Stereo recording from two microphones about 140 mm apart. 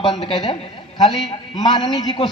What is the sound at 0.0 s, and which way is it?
Speech, 35° left (ahead or behind).